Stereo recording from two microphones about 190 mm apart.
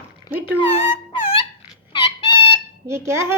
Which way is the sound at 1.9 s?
25° left (ahead or behind).